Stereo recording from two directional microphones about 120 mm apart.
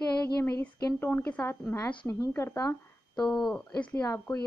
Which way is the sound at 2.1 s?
25° left (ahead or behind).